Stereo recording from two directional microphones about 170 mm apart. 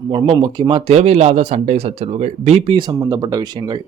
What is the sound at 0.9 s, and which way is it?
Speech, 40° right (ahead or behind).